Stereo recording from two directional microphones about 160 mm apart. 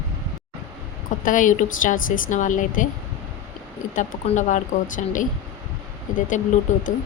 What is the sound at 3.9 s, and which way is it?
Speech, 50° left (ahead or behind).